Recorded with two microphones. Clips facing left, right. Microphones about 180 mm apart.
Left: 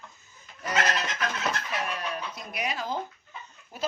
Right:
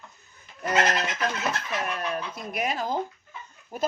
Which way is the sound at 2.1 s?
50° right (ahead or behind).